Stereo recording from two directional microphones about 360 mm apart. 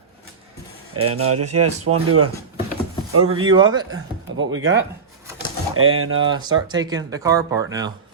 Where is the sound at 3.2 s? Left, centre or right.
Centre.